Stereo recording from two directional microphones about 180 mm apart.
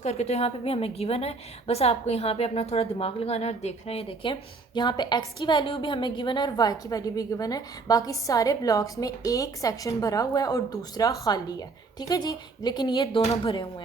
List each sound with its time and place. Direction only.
0.0 s a woman's voice: 35° left (ahead or behind)